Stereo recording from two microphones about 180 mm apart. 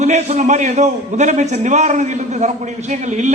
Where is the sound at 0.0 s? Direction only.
40° right (ahead or behind).